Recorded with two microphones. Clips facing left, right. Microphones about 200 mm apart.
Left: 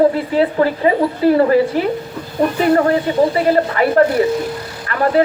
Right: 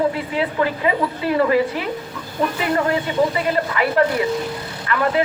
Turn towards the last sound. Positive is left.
turn(degrees=40)  # may be behind; listen again after turning